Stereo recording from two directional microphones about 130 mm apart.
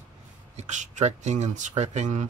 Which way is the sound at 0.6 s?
65° right (ahead or behind).